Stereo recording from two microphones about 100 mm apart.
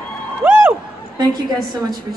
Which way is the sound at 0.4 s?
20° right (ahead or behind).